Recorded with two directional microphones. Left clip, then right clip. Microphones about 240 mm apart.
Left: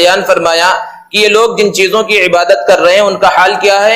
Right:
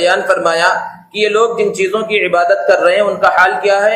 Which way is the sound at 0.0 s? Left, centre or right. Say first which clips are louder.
Left 4 dB; left.